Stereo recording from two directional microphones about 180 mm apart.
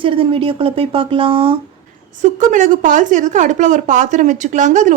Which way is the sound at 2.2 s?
45° right (ahead or behind).